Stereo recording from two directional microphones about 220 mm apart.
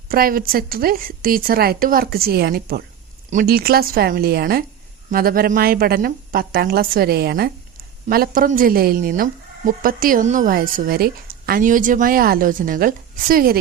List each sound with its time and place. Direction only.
0.1 s a woman's voice: 40° right (ahead or behind)